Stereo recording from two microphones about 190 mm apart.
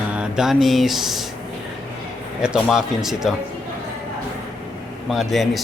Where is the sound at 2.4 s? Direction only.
Centre (ahead or behind).